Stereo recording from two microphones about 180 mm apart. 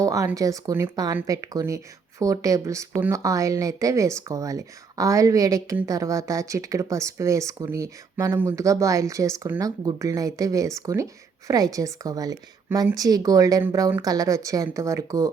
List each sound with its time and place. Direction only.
0.0 s speech: 15° right (ahead or behind)